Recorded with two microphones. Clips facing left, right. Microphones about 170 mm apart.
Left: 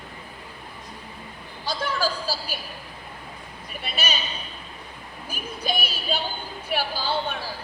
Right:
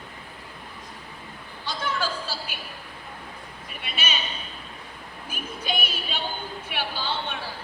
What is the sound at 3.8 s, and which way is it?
Speech, 35° left (ahead or behind).